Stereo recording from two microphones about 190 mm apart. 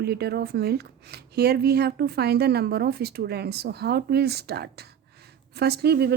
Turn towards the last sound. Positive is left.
turn(degrees=-60)  # may be behind; listen again after turning